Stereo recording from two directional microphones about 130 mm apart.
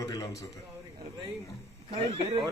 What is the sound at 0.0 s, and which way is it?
Speech, 30° left (ahead or behind).